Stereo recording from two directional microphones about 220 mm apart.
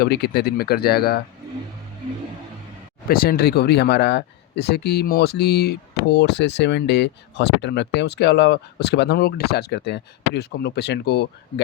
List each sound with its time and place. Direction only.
0.0 s speech: 45° left (ahead or behind)
3.1 s speech: 45° left (ahead or behind)